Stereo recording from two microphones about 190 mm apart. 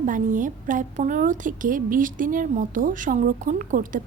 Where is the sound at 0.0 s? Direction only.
45° right (ahead or behind).